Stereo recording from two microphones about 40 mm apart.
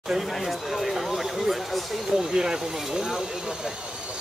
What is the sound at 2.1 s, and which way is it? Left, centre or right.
Speech, centre.